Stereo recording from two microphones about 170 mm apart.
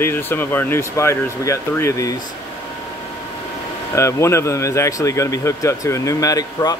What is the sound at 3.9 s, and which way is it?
Speech, 15° left (ahead or behind).